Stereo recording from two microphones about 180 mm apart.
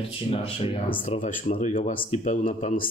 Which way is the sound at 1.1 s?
40° left (ahead or behind).